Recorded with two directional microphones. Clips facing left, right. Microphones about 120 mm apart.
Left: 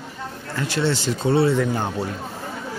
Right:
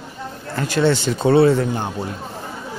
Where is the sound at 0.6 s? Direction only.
50° right (ahead or behind).